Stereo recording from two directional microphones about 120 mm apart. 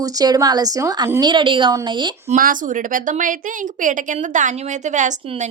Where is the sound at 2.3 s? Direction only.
90° right.